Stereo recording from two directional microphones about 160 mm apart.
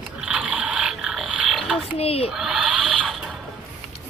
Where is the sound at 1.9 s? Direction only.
40° left (ahead or behind).